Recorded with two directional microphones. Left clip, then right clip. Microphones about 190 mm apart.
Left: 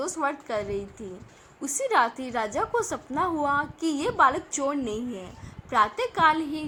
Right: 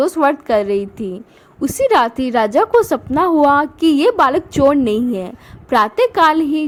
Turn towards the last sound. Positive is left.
turn(degrees=-50)  # may be behind; listen again after turning